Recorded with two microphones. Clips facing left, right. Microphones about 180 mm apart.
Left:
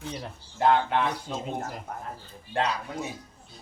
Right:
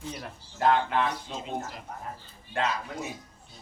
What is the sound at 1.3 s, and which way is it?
Speech, 45° left (ahead or behind).